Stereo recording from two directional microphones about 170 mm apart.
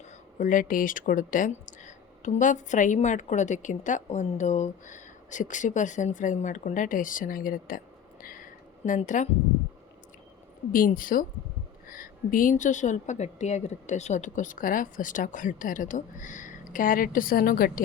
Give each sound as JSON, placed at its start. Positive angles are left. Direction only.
{"t": 0.3, "sound": "speech", "side_deg": 50}
{"t": 8.2, "sound": "a sound", "side_deg": 55}
{"t": 10.7, "sound": "speech", "side_deg": 55}